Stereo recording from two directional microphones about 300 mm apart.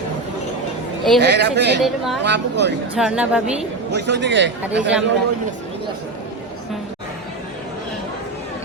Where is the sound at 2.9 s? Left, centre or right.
Centre.